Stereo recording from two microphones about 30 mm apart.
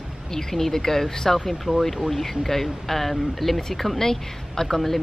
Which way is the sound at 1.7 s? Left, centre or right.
Right.